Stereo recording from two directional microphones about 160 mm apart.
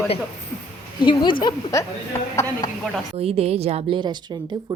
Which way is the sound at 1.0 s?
30° left (ahead or behind).